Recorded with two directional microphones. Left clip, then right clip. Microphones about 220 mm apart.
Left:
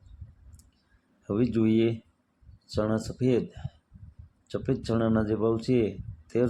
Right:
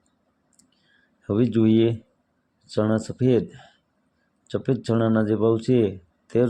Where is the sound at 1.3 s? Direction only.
25° right (ahead or behind).